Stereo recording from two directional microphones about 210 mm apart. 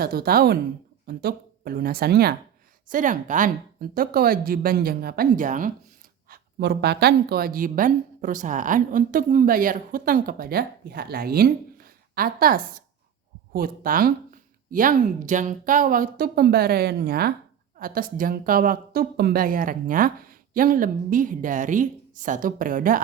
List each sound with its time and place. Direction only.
0.0 s a woman's voice: 45° right (ahead or behind)
2.9 s a woman's voice: 40° right (ahead or behind)
6.3 s a woman's voice: 50° right (ahead or behind)